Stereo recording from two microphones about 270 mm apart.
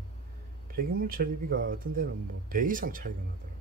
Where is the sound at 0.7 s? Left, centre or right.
Right.